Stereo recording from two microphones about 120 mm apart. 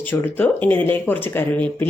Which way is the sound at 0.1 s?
15° left (ahead or behind).